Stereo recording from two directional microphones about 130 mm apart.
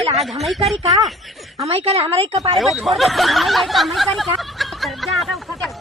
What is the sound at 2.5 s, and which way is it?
Speech, centre (ahead or behind).